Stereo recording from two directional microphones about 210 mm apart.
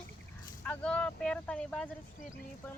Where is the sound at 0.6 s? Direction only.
5° left (ahead or behind).